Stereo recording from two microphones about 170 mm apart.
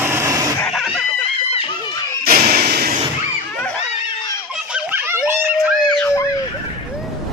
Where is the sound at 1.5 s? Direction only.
30° left (ahead or behind).